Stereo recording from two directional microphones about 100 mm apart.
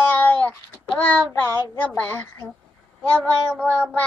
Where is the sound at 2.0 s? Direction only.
20° left (ahead or behind).